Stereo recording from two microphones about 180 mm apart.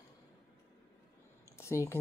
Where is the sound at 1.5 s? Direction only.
15° left (ahead or behind).